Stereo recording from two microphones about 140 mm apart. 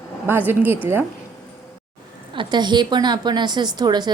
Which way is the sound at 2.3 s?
35° right (ahead or behind).